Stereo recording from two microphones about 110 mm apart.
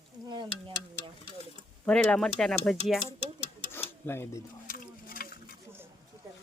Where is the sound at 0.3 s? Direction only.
40° right (ahead or behind).